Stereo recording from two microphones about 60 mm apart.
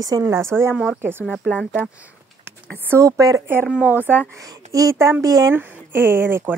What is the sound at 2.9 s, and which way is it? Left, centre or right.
Speech, right.